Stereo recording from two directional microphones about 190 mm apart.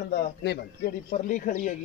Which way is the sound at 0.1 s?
60° left (ahead or behind).